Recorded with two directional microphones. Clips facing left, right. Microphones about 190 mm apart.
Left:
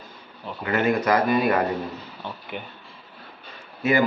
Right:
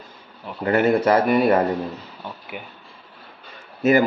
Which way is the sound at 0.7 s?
30° right (ahead or behind).